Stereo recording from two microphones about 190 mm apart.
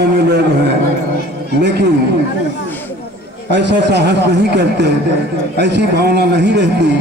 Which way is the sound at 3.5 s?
65° right (ahead or behind).